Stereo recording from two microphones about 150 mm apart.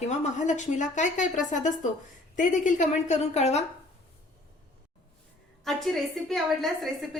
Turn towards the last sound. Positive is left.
turn(degrees=0)  # may be behind; listen again after turning